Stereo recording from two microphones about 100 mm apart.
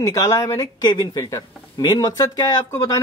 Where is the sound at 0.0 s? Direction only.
35° left (ahead or behind).